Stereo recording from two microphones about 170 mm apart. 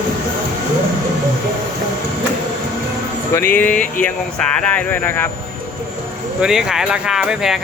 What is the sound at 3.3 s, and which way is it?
Speech, 10° left (ahead or behind).